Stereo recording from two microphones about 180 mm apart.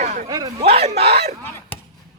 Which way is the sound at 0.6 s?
35° right (ahead or behind).